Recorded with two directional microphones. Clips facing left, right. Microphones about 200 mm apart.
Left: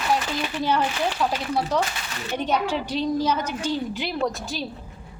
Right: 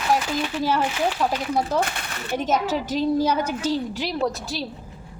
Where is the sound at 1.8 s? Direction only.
55° right (ahead or behind).